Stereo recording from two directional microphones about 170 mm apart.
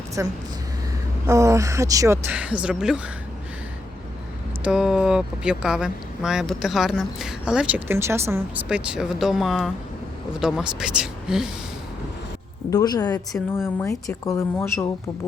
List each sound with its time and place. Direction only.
0.2 s speech: 15° right (ahead or behind)
4.6 s speech: 5° right (ahead or behind)
8.9 s speech: 5° right (ahead or behind)
12.7 s a woman's voice: 25° left (ahead or behind)
13.1 s speech: 10° left (ahead or behind)